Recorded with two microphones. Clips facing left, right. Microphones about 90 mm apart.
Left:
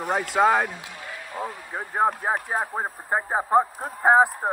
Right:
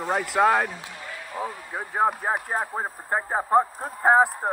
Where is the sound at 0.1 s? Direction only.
Centre (ahead or behind).